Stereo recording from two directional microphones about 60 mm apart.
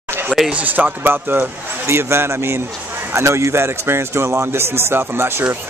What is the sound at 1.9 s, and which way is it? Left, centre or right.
Speech, right.